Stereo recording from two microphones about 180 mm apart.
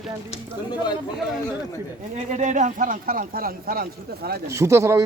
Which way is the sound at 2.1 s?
40° right (ahead or behind).